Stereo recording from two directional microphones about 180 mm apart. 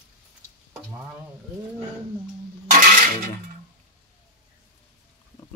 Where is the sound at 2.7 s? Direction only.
45° right (ahead or behind).